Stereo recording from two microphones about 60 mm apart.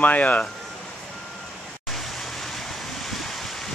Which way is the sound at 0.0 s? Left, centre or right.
Left.